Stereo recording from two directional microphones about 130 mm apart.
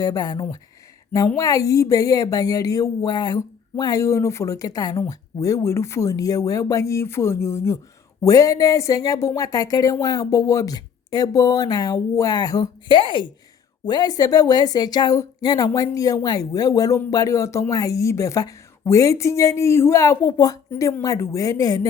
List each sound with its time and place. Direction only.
0.0 s speech: 30° left (ahead or behind)